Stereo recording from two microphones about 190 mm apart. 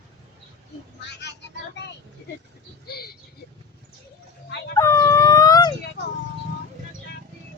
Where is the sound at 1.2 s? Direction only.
65° left (ahead or behind).